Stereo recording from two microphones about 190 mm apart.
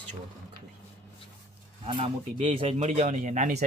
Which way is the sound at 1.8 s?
30° right (ahead or behind).